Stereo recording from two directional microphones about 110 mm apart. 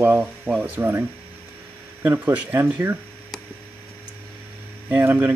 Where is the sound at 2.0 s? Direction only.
15° right (ahead or behind).